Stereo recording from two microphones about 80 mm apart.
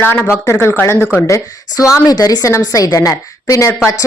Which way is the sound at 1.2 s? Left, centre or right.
Left.